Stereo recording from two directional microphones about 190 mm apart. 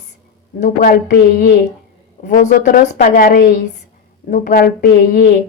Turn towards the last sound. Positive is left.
turn(degrees=50)  # may be behind; listen again after turning